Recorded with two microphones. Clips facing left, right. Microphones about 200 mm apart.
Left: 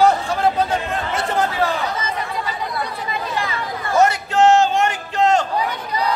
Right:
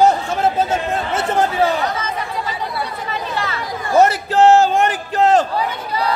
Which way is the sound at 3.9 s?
35° right (ahead or behind).